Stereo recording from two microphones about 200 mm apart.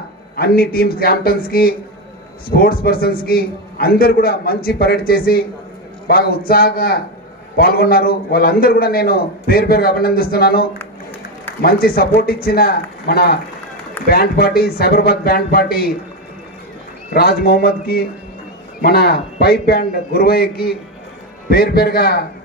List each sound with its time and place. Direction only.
0.4 s a man's voice: 50° left (ahead or behind)
17.1 s a man's voice: 50° left (ahead or behind)